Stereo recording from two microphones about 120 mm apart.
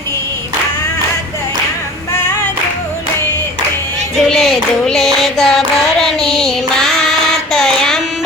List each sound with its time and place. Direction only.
4.2 s music: 5° left (ahead or behind)
7.5 s child singing: 5° left (ahead or behind)